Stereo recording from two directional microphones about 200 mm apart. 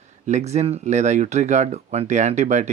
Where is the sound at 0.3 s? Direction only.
35° right (ahead or behind).